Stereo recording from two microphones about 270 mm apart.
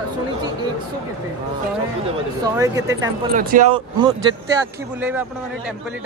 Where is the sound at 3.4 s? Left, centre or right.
Right.